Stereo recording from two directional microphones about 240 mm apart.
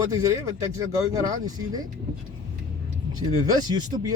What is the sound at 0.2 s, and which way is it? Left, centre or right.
Speech, centre.